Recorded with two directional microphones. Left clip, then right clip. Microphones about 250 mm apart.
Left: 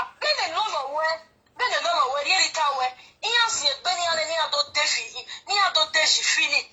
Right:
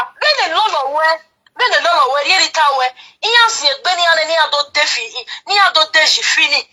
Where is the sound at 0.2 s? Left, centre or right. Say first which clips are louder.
Right 11 dB; right.